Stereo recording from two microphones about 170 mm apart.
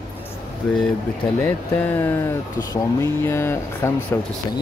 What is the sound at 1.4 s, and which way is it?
Speech, 10° left (ahead or behind).